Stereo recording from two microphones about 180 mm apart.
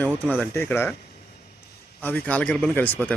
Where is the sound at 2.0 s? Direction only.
10° left (ahead or behind).